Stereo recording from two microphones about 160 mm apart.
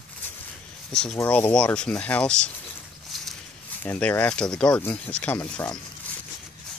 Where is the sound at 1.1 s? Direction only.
15° left (ahead or behind).